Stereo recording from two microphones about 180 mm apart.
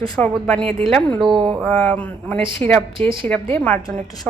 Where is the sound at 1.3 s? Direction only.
25° right (ahead or behind).